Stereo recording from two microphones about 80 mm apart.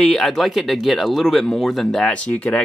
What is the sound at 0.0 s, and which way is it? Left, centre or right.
Speech, centre.